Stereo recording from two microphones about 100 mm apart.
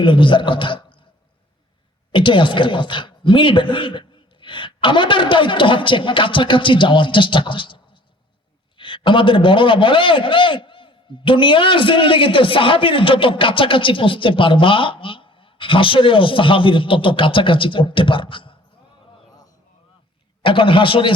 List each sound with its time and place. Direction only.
0.0 s a man's voice: 55° left (ahead or behind)
2.1 s a man's voice: 55° left (ahead or behind)
8.8 s a man's voice: 55° left (ahead or behind)
20.4 s a man's voice: 60° left (ahead or behind)